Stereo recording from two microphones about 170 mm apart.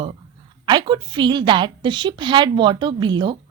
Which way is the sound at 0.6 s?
25° right (ahead or behind).